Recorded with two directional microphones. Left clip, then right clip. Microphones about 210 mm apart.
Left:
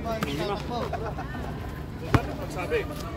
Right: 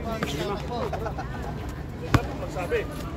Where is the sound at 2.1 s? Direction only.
40° right (ahead or behind).